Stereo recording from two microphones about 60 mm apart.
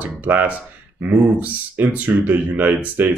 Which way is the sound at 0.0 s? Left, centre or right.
Right.